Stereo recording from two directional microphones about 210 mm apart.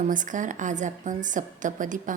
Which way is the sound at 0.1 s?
40° right (ahead or behind).